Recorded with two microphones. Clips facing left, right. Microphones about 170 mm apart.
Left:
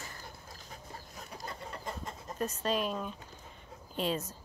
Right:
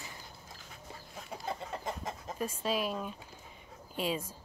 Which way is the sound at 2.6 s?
5° right (ahead or behind).